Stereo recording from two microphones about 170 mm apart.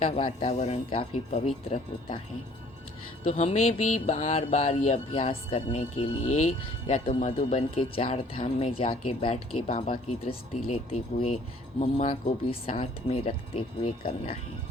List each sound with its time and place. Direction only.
0.0 s speech: 35° left (ahead or behind)
3.2 s speech: 40° left (ahead or behind)